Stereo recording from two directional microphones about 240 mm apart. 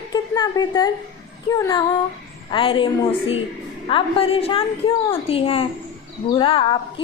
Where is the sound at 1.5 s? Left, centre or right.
Centre.